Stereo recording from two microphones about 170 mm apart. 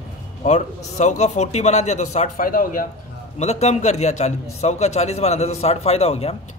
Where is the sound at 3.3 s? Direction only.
40° left (ahead or behind).